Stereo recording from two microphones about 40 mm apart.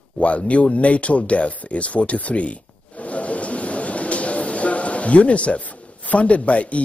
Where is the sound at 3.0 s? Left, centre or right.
Left.